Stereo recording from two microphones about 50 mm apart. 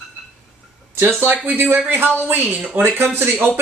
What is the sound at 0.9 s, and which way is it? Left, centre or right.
Speech, right.